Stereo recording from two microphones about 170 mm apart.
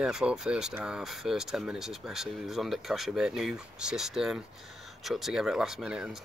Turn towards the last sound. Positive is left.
turn(degrees=-5)  # may be behind; listen again after turning